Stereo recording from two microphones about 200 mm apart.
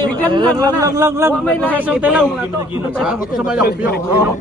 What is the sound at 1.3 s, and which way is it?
Speech, 5° left (ahead or behind).